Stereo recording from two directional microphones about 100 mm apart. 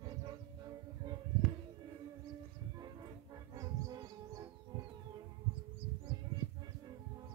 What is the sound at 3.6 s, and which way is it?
Music, 40° right (ahead or behind).